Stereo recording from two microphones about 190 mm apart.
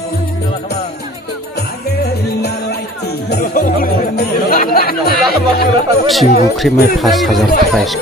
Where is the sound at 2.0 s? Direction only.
60° left (ahead or behind).